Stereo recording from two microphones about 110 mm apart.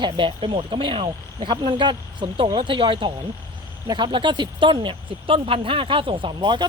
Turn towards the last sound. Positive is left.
turn(degrees=-45)  # may be behind; listen again after turning